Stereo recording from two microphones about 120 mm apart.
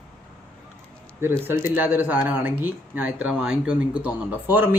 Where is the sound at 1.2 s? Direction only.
20° right (ahead or behind).